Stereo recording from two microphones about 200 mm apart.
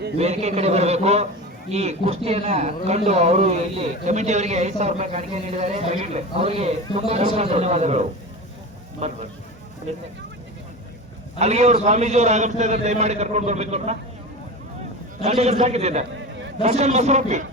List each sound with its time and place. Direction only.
0.2 s speech: 30° right (ahead or behind)
11.3 s speech: 35° right (ahead or behind)
15.2 s speech: 30° right (ahead or behind)